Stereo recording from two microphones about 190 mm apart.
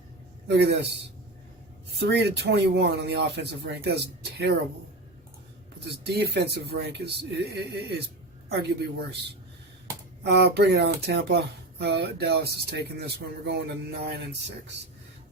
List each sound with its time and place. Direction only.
0.4 s speech: 65° right (ahead or behind)
2.0 s speech: 60° right (ahead or behind)
6.1 s speech: 60° right (ahead or behind)
10.2 s speech: 60° right (ahead or behind)